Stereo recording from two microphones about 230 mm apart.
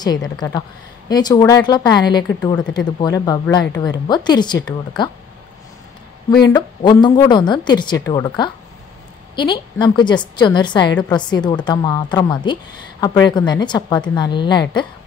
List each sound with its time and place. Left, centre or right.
0.0 s speech: centre
6.4 s speech: centre